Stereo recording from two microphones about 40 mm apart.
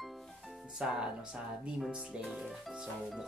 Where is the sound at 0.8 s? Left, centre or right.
Right.